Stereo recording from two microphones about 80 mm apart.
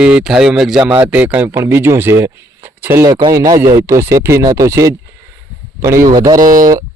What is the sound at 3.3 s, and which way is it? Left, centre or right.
A man's voice, right.